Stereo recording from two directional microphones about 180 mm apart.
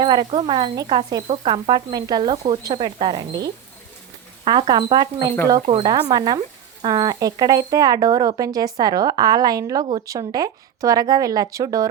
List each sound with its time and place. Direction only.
0.0 s speech: 25° right (ahead or behind)